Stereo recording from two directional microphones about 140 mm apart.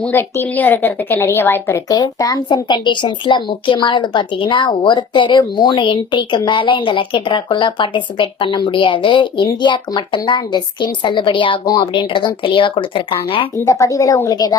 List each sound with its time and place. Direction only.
0.0 s a woman's voice: 15° left (ahead or behind)
1.9 s a woman's voice: 25° left (ahead or behind)
13.7 s a woman's voice: 20° left (ahead or behind)